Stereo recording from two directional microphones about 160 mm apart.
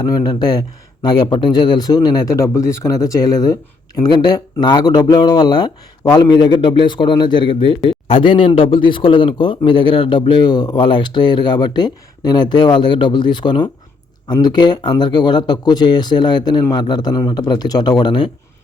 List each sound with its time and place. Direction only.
0.0 s speech: 25° left (ahead or behind)